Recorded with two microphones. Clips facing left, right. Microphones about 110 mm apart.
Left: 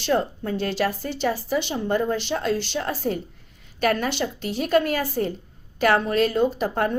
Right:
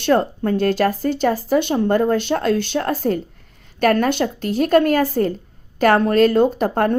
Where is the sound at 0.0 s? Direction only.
55° right (ahead or behind).